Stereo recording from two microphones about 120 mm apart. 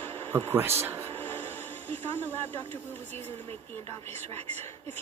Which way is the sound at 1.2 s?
15° left (ahead or behind).